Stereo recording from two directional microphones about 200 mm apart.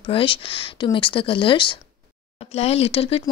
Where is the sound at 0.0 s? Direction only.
25° left (ahead or behind).